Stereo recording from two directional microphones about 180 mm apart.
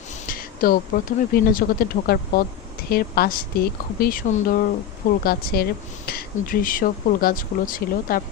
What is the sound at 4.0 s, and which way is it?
Speech, 45° left (ahead or behind).